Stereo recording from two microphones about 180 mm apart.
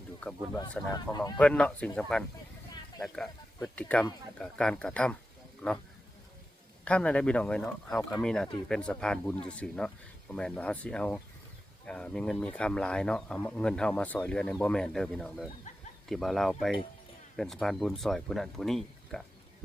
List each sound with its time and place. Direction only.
0.2 s speech: 10° left (ahead or behind)
0.9 s speech: 20° left (ahead or behind)
1.4 s speech: 5° left (ahead or behind)
6.8 s speech: 5° left (ahead or behind)